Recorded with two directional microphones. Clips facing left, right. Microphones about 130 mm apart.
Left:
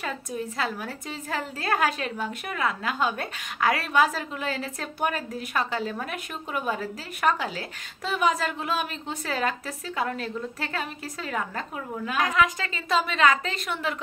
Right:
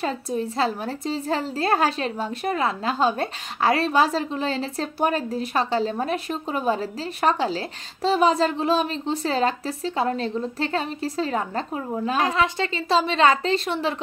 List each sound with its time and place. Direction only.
0.0 s a woman's voice: 30° right (ahead or behind)